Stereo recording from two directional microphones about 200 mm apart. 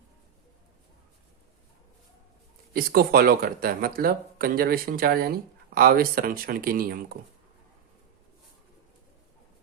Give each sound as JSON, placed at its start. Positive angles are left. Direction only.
{"t": 2.7, "sound": "speech", "side_deg": -50}